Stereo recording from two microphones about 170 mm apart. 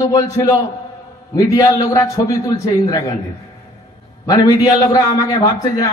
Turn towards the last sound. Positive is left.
turn(degrees=20)  # may be behind; listen again after turning